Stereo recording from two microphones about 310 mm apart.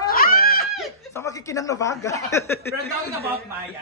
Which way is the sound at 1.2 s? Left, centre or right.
Centre.